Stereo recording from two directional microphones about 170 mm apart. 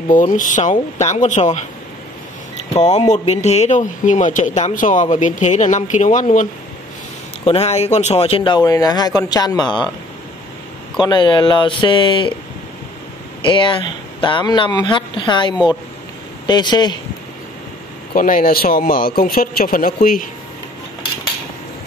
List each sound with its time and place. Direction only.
0.1 s speech: 50° left (ahead or behind)
2.7 s speech: 40° left (ahead or behind)
7.4 s speech: 40° left (ahead or behind)
11.0 s speech: 25° left (ahead or behind)
13.4 s speech: 30° left (ahead or behind)
18.1 s speech: 55° left (ahead or behind)